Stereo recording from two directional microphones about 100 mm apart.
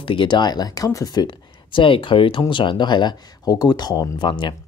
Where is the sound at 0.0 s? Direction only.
55° left (ahead or behind).